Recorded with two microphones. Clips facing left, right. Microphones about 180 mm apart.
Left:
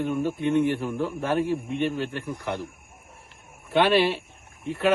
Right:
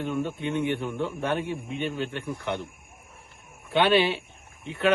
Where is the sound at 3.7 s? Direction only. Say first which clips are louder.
Left 1 dB; centre (ahead or behind).